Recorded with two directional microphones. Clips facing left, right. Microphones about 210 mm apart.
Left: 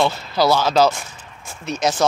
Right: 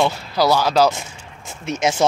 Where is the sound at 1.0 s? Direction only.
20° right (ahead or behind).